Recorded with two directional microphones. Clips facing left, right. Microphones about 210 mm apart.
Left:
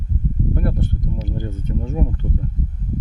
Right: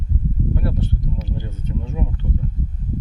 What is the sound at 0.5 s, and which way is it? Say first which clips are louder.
Speech: left 1 dB; 50° left (ahead or behind).